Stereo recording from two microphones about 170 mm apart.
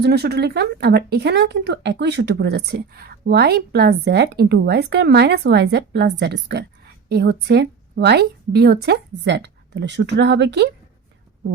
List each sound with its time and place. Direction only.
0.0 s speech: 70° right (ahead or behind)